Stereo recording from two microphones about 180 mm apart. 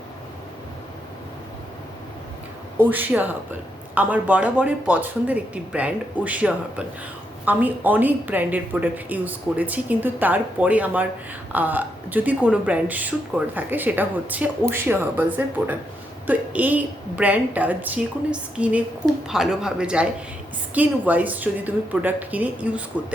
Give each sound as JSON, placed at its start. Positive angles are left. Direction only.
{"t": 2.7, "sound": "speech", "side_deg": -10}